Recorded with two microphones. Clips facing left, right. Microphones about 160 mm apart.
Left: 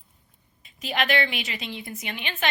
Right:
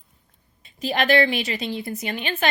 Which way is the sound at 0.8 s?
35° right (ahead or behind).